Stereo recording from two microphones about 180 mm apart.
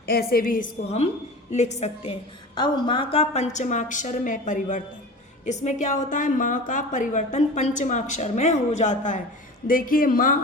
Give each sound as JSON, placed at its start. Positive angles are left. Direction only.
{"t": 0.0, "sound": "a woman's voice", "side_deg": 60}
{"t": 2.6, "sound": "a woman's voice", "side_deg": 25}